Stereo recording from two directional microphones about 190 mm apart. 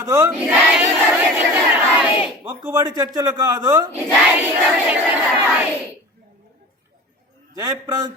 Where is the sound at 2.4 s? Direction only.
20° right (ahead or behind).